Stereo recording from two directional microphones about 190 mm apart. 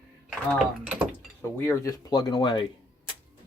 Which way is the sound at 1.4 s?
10° left (ahead or behind).